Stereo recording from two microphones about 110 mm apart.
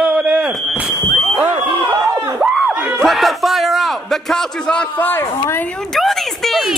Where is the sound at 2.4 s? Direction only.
Centre (ahead or behind).